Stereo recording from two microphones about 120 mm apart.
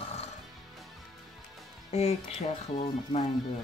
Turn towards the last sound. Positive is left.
turn(degrees=60)  # may be behind; listen again after turning